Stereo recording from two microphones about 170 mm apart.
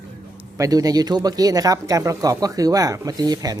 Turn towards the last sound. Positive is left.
turn(degrees=-20)  # may be behind; listen again after turning